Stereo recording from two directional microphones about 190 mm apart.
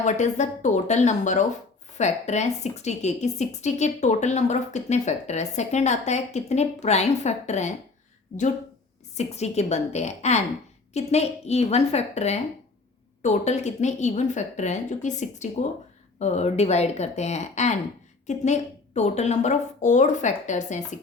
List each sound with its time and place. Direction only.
0.0 s speech: 40° left (ahead or behind)
9.1 s speech: 35° left (ahead or behind)